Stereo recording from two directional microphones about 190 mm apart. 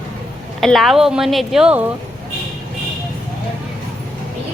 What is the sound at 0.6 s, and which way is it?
Speech, centre (ahead or behind).